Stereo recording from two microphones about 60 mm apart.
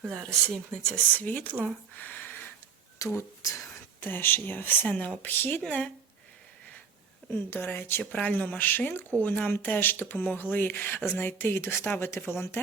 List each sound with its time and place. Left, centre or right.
0.2 s speech: centre
0.9 s speech: left
2.0 s a sound: left
3.0 s speech: left
4.0 s speech: left
4.9 s speech: left
5.6 s speech: centre
7.5 s speech: left